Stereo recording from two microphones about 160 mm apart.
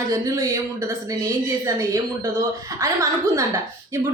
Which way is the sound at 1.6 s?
20° right (ahead or behind).